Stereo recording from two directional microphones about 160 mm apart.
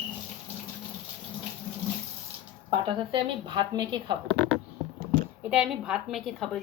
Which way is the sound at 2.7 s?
30° right (ahead or behind).